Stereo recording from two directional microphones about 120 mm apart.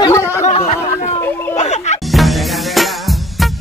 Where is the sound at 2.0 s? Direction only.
Centre (ahead or behind).